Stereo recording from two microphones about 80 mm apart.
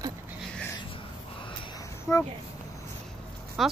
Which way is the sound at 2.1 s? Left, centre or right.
Left.